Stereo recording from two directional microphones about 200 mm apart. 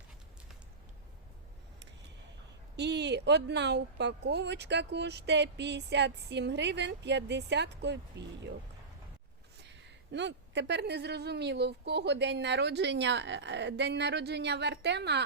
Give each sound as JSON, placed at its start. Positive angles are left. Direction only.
{"t": 2.7, "sound": "speech", "side_deg": -60}
{"t": 10.1, "sound": "speech", "side_deg": -60}